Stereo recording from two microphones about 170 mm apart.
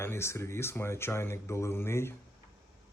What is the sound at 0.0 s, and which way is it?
Speech, 15° left (ahead or behind).